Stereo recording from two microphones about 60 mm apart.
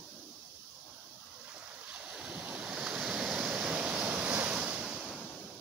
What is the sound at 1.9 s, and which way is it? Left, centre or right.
Waves, centre.